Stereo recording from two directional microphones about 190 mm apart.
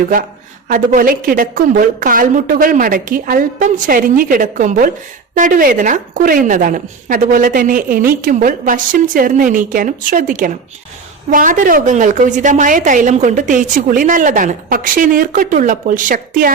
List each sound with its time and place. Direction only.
0.7 s a woman's voice: 45° right (ahead or behind)